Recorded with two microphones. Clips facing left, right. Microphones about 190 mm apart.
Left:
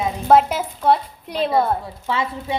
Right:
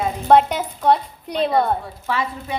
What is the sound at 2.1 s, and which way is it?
Speech, 25° left (ahead or behind).